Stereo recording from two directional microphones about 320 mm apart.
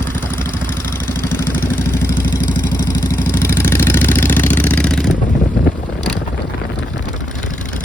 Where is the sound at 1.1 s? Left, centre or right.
Centre.